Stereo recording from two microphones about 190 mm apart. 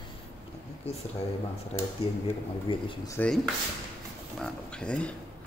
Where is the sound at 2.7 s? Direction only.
25° left (ahead or behind).